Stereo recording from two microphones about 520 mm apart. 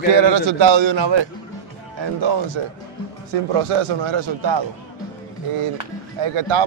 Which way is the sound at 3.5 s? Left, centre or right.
Right.